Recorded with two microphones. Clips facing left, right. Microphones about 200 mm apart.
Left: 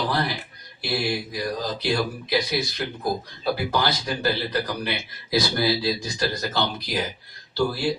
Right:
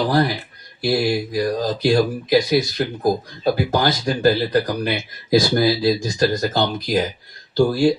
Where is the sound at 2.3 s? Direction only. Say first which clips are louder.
Right 8 dB; 45° right (ahead or behind).